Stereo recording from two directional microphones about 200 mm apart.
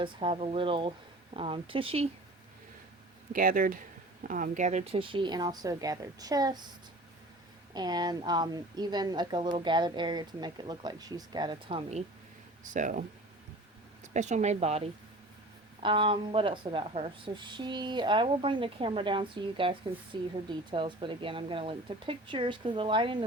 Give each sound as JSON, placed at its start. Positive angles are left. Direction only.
{"t": 0.0, "sound": "speech", "side_deg": -25}
{"t": 3.3, "sound": "speech", "side_deg": -45}
{"t": 7.7, "sound": "speech", "side_deg": -20}